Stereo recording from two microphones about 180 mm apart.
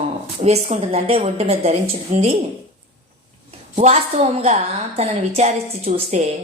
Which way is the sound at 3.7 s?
35° right (ahead or behind).